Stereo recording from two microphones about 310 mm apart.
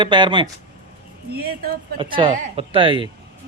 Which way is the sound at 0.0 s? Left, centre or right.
Centre.